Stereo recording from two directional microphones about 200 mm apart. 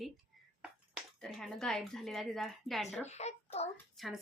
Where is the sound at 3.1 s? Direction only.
35° left (ahead or behind).